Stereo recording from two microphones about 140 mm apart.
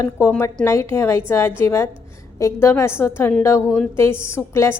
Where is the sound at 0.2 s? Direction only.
20° left (ahead or behind).